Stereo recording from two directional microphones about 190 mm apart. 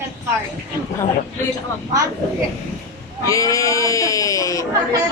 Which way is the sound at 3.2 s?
15° left (ahead or behind).